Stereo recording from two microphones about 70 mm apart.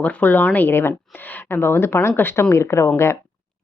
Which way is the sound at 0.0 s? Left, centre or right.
Left.